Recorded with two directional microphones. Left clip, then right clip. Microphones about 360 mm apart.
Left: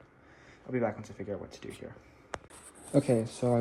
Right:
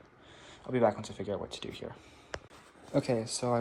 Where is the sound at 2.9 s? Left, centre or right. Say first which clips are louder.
Left 3 dB; left.